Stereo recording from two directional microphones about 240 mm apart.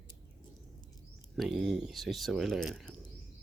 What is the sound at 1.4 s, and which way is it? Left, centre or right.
Speech, centre.